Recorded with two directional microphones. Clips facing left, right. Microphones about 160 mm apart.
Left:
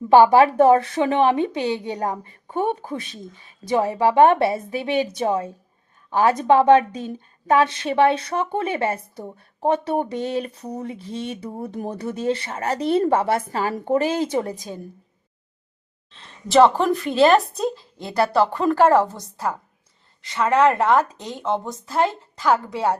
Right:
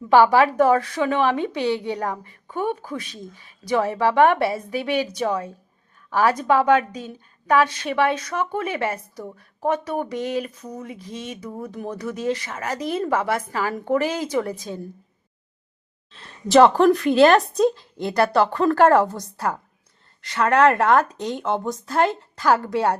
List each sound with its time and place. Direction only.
0.1 s a woman's voice: 20° left (ahead or behind)
16.1 s speech: centre (ahead or behind)